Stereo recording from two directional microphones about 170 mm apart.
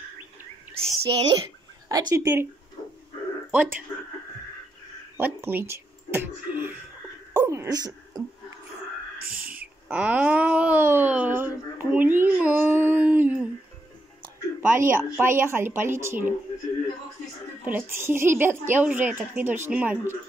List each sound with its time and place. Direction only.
1.0 s speech: 30° right (ahead or behind)
3.5 s a woman's voice: 10° right (ahead or behind)
5.1 s speech: 15° right (ahead or behind)
7.3 s dog: 15° right (ahead or behind)
9.2 s owl: 60° right (ahead or behind)
9.5 s speech: 10° right (ahead or behind)
14.6 s a woman's voice: 15° right (ahead or behind)
17.6 s a woman's voice: 10° right (ahead or behind)